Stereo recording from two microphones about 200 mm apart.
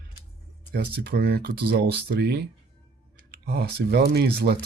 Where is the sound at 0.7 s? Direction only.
50° right (ahead or behind).